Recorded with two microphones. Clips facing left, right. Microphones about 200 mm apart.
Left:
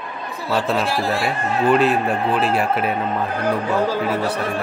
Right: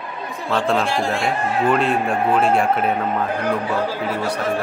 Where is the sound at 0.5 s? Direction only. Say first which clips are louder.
Right 1 dB; 5° left (ahead or behind).